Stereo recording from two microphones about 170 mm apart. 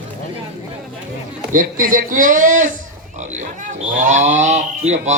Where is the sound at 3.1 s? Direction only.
45° right (ahead or behind).